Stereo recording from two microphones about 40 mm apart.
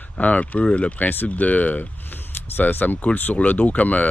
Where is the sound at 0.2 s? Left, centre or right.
Left.